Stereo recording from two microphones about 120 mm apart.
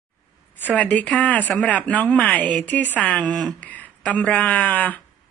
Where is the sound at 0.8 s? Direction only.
10° left (ahead or behind).